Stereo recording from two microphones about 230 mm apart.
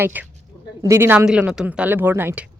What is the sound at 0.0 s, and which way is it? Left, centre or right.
Speech, centre.